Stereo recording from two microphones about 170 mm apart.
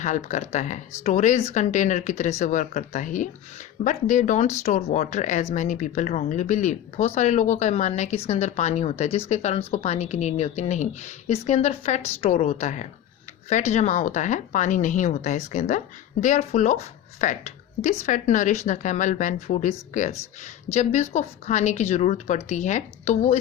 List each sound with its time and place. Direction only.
0.0 s a woman's voice: 45° left (ahead or behind)